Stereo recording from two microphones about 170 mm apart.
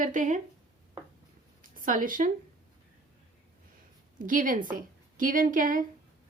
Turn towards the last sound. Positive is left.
turn(degrees=-50)  # may be behind; listen again after turning